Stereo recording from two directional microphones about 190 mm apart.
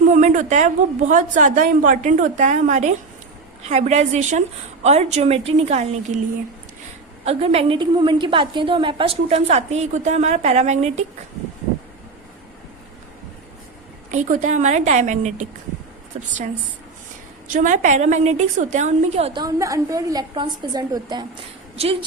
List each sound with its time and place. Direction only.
0.1 s a woman's voice: 40° right (ahead or behind)
7.3 s a woman's voice: 30° right (ahead or behind)
14.1 s a woman's voice: 40° right (ahead or behind)
17.5 s a woman's voice: 40° right (ahead or behind)
19.4 s a woman's voice: 20° right (ahead or behind)